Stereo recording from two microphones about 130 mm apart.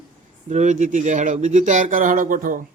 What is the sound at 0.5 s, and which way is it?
Speech, 70° right (ahead or behind).